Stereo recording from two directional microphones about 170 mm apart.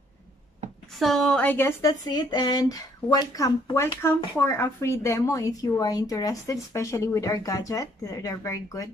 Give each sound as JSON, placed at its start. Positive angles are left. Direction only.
{"t": 0.9, "sound": "a woman's voice", "side_deg": 0}